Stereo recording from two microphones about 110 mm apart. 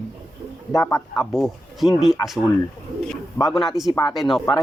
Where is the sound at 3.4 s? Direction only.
30° left (ahead or behind).